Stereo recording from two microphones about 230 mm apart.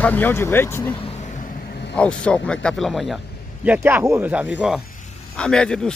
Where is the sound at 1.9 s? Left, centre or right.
Centre.